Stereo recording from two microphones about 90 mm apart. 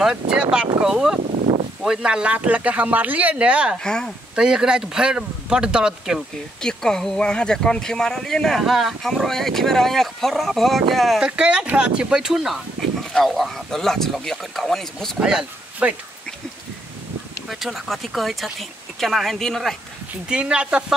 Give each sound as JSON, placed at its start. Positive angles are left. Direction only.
{"t": 0.0, "sound": "speech", "side_deg": -10}
{"t": 3.8, "sound": "speech", "side_deg": 10}
{"t": 4.4, "sound": "speech", "side_deg": -10}
{"t": 6.6, "sound": "speech", "side_deg": 5}
{"t": 11.2, "sound": "speech", "side_deg": -10}
{"t": 12.8, "sound": "a sound", "side_deg": 0}
{"t": 13.1, "sound": "speech", "side_deg": 0}
{"t": 15.1, "sound": "speech", "side_deg": -10}
{"t": 17.5, "sound": "speech", "side_deg": 0}
{"t": 20.2, "sound": "speech", "side_deg": -10}